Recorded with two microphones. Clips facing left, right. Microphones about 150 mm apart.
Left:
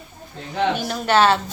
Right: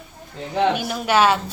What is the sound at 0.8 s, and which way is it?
Speech, 5° right (ahead or behind).